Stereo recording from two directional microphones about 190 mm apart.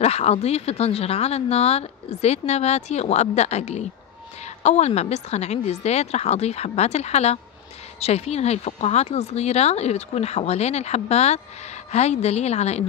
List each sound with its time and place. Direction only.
0.0 s speech: 35° left (ahead or behind)